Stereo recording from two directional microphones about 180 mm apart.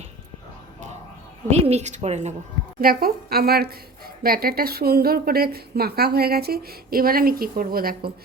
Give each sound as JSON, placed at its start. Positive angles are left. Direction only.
{"t": 1.5, "sound": "a woman's voice", "side_deg": -35}
{"t": 2.8, "sound": "a woman's voice", "side_deg": -55}